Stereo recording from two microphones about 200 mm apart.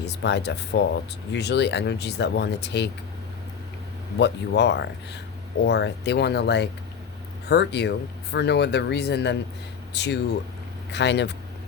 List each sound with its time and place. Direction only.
0.0 s speech: 60° left (ahead or behind)
4.2 s speech: 60° left (ahead or behind)